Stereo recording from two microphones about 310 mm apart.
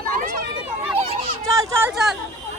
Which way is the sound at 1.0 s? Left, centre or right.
Centre.